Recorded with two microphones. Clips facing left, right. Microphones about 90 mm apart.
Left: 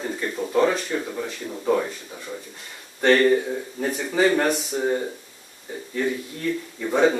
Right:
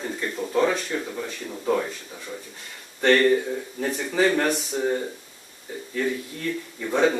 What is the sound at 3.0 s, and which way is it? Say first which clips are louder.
Speech: left 1 dB; 5° left (ahead or behind).